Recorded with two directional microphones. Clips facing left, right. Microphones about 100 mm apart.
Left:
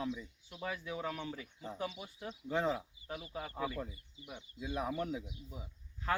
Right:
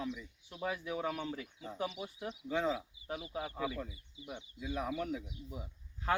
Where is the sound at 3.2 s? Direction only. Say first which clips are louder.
Right 1 dB; 10° right (ahead or behind).